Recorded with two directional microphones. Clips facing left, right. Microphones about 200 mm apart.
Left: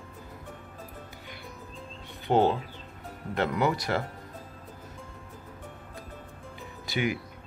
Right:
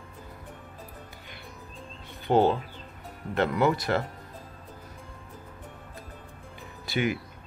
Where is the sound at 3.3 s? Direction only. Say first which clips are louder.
Right 2 dB; 15° left (ahead or behind).